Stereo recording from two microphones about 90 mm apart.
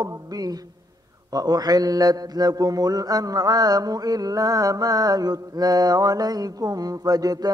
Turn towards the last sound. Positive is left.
turn(degrees=-45)  # may be behind; listen again after turning